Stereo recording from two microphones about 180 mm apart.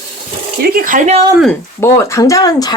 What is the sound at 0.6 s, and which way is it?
Speech, 50° right (ahead or behind).